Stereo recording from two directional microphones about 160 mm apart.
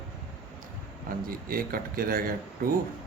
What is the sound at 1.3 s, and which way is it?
Speech, 65° right (ahead or behind).